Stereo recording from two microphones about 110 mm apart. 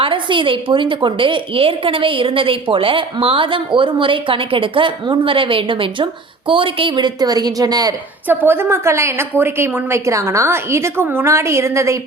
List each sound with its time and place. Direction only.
0.0 s a woman's voice: 50° right (ahead or behind)
8.3 s a woman's voice: 20° right (ahead or behind)